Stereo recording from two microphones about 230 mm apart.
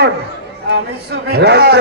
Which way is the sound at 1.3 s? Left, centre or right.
Right.